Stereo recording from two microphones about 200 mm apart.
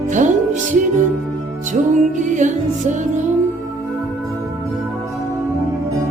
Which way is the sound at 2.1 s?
40° right (ahead or behind).